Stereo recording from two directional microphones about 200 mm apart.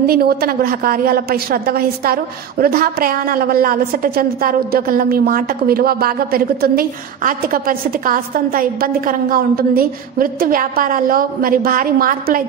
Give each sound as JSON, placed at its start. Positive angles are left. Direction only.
{"t": 0.0, "sound": "a woman's voice", "side_deg": -50}